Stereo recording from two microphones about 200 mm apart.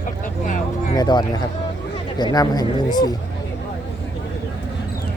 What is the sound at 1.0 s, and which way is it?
Speech, 20° left (ahead or behind).